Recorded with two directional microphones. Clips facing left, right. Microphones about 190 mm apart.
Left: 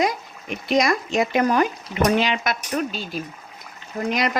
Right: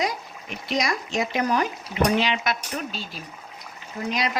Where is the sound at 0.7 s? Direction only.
55° left (ahead or behind).